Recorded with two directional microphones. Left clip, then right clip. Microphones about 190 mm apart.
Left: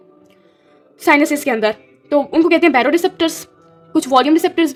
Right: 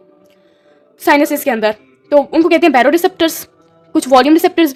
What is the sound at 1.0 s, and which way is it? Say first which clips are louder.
A woman's voice: right 2 dB; 20° right (ahead or behind).